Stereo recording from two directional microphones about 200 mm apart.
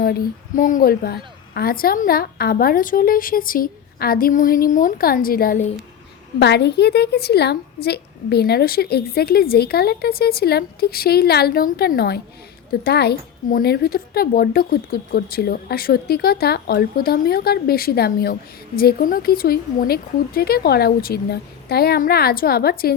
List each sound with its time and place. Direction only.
0.0 s a woman's voice: 45° left (ahead or behind)
6.4 s a woman's voice: 55° left (ahead or behind)